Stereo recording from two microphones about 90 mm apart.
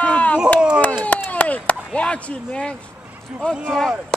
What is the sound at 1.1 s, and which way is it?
Chop, 20° left (ahead or behind).